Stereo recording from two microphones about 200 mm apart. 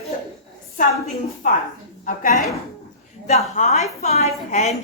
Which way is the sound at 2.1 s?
40° left (ahead or behind).